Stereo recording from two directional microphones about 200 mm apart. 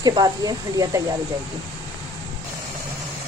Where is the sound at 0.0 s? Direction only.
20° right (ahead or behind).